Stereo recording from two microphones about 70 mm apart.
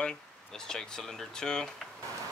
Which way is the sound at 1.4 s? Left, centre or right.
Centre.